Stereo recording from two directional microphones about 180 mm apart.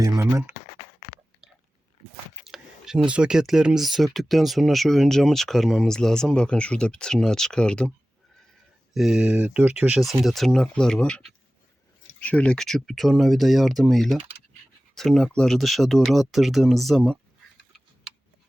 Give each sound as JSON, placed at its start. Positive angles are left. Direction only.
{"t": 0.2, "sound": "speech", "side_deg": -15}
{"t": 2.4, "sound": "speech", "side_deg": 0}